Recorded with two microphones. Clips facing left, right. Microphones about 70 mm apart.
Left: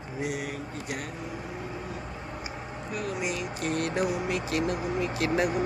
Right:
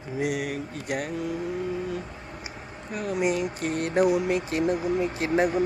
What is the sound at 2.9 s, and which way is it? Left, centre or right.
Speech, right.